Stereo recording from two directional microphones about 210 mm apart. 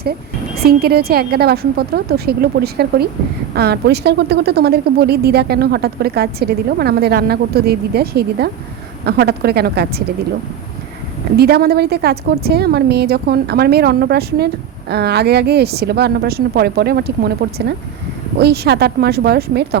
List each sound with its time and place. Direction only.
0.6 s a woman's voice: 50° right (ahead or behind)
11.3 s a woman's voice: 50° right (ahead or behind)